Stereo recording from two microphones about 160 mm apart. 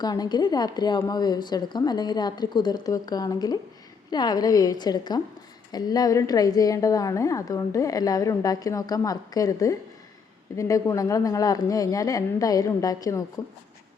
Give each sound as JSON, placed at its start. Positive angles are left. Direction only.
{"t": 0.0, "sound": "a woman's voice", "side_deg": 25}